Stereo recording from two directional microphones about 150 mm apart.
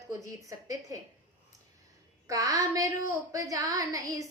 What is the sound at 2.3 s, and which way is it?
A woman's voice, 20° right (ahead or behind).